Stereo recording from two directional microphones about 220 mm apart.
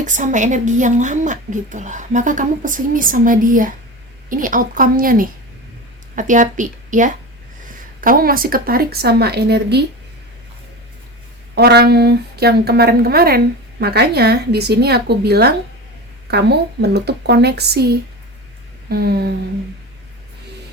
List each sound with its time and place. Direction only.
0.0 s a woman's voice: 35° right (ahead or behind)
11.5 s a woman's voice: 45° right (ahead or behind)